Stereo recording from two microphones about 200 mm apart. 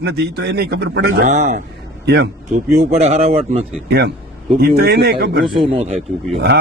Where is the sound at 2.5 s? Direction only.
35° right (ahead or behind).